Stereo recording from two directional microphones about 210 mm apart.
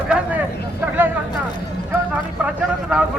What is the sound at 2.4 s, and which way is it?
Speech, 5° right (ahead or behind).